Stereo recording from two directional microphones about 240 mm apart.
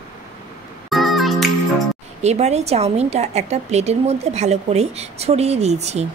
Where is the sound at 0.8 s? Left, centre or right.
Centre.